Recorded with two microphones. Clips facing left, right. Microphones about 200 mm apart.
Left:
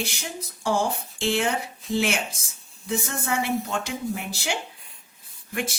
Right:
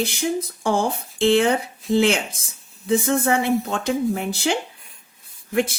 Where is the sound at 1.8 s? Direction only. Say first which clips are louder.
Right 7 dB; centre (ahead or behind).